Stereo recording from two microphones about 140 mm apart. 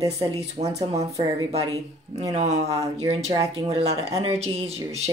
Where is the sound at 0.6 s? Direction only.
55° right (ahead or behind).